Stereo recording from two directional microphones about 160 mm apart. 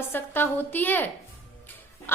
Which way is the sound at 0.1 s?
15° left (ahead or behind).